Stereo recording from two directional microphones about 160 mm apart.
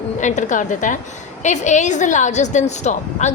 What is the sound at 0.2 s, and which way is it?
A woman's voice, 50° left (ahead or behind).